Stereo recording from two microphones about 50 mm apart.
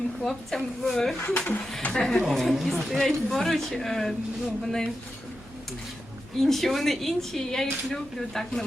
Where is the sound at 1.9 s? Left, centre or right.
Centre.